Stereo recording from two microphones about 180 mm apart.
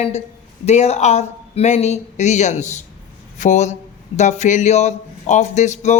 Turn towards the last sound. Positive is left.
turn(degrees=40)  # may be behind; listen again after turning